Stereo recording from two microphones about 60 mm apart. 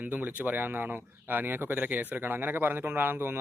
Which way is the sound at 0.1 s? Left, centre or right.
Right.